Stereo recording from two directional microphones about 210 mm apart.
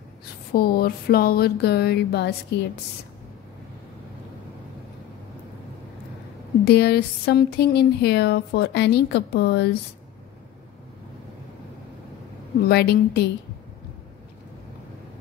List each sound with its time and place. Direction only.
0.5 s speech: 45° left (ahead or behind)
6.6 s speech: 50° left (ahead or behind)
12.6 s speech: 50° left (ahead or behind)